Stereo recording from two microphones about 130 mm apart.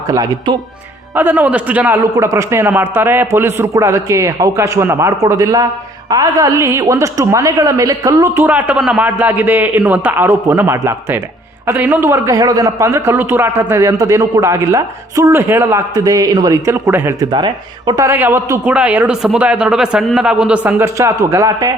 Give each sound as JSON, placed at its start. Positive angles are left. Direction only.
{"t": 0.1, "sound": "a man's voice", "side_deg": -30}
{"t": 1.1, "sound": "speech", "side_deg": -15}
{"t": 2.1, "sound": "a man's voice", "side_deg": -25}
{"t": 17.3, "sound": "speech", "side_deg": -35}
{"t": 18.0, "sound": "speech", "side_deg": -15}
{"t": 20.8, "sound": "a man's voice", "side_deg": -25}